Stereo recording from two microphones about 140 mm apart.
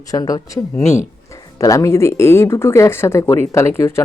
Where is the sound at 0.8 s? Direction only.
55° left (ahead or behind).